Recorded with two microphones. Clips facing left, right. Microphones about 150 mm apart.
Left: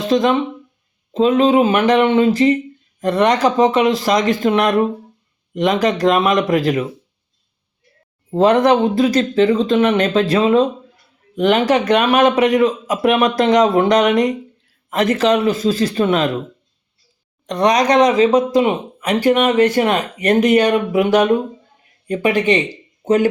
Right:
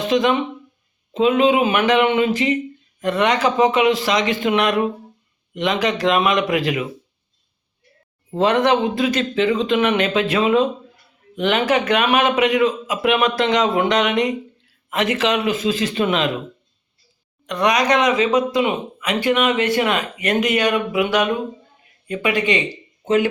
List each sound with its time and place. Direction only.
0.1 s speech: 35° left (ahead or behind)
8.4 s speech: 35° left (ahead or behind)
17.4 s speech: 30° left (ahead or behind)